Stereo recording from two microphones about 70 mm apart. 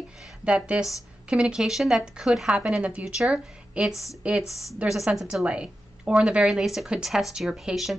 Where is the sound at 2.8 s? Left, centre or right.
Centre.